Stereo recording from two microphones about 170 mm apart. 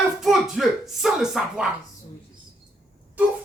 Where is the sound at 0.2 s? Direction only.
Centre (ahead or behind).